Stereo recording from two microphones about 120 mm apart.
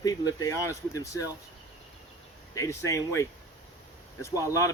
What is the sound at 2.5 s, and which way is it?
Speech, 25° left (ahead or behind).